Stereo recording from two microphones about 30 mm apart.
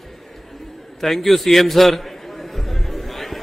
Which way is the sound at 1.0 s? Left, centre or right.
Centre.